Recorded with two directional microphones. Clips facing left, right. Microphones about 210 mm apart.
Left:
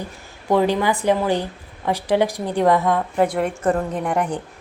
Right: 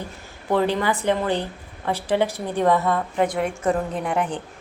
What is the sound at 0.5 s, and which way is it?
A woman's voice, 10° left (ahead or behind).